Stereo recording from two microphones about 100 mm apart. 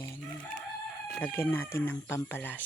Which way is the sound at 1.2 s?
20° left (ahead or behind).